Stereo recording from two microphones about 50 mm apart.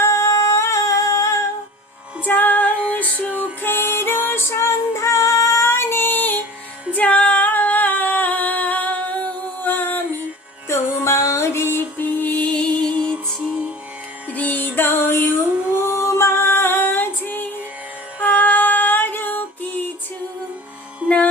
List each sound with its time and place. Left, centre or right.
0.0 s singing: left
2.2 s music: left
3.6 s music: left
6.9 s singing: left
10.7 s music: left; by 13.1 s centre
14.3 s music: left
15.7 s female singing: left
18.2 s music: left